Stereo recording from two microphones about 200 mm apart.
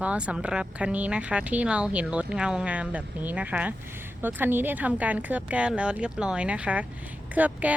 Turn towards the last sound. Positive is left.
turn(degrees=-5)  # may be behind; listen again after turning